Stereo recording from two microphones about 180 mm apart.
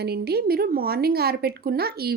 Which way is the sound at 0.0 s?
60° right (ahead or behind).